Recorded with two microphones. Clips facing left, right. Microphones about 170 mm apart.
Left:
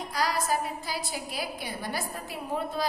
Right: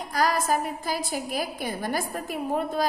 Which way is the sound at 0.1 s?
50° right (ahead or behind).